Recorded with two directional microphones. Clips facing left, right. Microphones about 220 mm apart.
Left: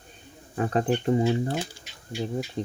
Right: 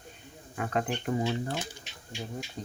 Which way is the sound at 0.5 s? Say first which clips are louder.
Left 7 dB; 30° left (ahead or behind).